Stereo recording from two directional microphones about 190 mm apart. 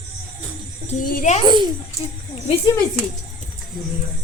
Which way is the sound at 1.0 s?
40° left (ahead or behind).